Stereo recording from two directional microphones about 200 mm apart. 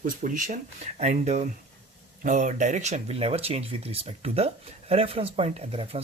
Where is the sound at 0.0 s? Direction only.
40° right (ahead or behind).